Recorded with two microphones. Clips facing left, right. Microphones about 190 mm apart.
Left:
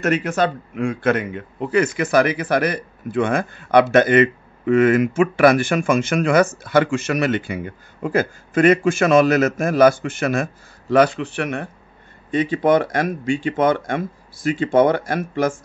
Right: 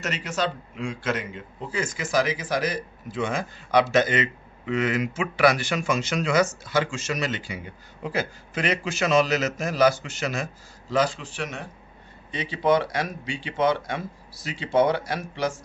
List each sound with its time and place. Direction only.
0.0 s a man's voice: 55° left (ahead or behind)